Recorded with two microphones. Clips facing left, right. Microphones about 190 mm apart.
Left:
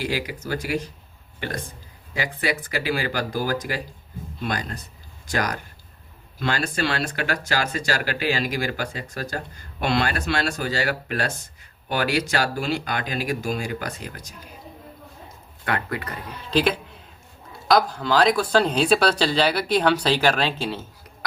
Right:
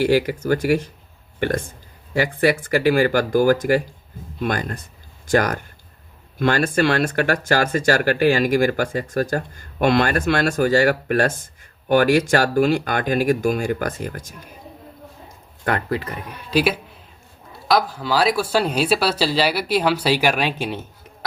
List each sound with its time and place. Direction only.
0.0 s speech: 50° right (ahead or behind)
15.6 s speech: 40° right (ahead or behind)
16.5 s speech: 10° right (ahead or behind)